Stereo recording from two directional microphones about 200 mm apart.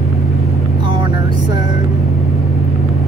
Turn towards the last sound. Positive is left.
turn(degrees=-20)  # may be behind; listen again after turning